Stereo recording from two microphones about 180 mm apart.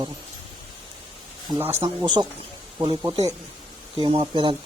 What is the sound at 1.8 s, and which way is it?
Speech, 25° right (ahead or behind).